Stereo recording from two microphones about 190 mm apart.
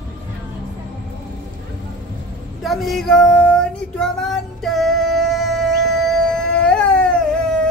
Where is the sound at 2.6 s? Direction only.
Centre (ahead or behind).